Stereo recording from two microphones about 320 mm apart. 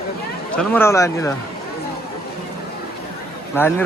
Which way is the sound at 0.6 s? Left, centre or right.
Centre.